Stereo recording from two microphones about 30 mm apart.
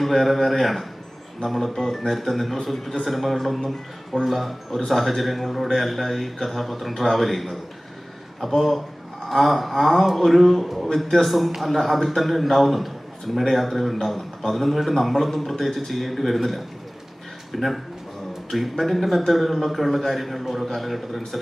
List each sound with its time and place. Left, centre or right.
0.0 s a man's voice: centre
14.2 s a man's voice: centre
14.8 s a man's voice: centre